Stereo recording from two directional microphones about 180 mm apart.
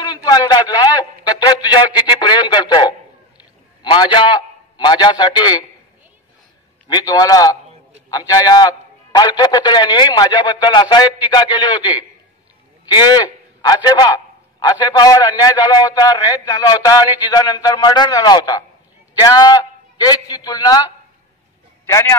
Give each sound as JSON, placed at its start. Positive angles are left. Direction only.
{"t": 0.0, "sound": "a man's voice", "side_deg": 20}
{"t": 6.9, "sound": "a man's voice", "side_deg": 20}